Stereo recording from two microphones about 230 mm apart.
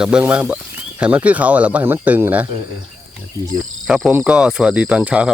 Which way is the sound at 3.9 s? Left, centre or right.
Centre.